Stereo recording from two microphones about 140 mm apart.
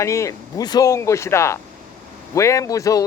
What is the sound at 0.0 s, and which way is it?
Speech, 20° left (ahead or behind).